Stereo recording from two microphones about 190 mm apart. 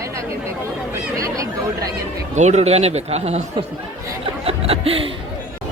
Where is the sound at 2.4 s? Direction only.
35° right (ahead or behind).